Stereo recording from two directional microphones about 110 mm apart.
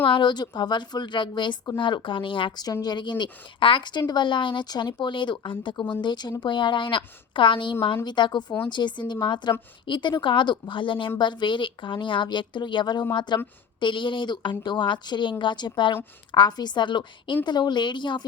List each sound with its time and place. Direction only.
0.1 s a woman's voice: 45° left (ahead or behind)